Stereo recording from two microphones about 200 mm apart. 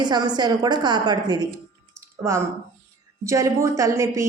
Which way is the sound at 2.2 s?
15° right (ahead or behind).